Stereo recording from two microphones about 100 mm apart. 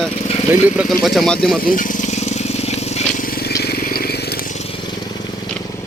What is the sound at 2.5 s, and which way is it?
Vehicle, 90° left.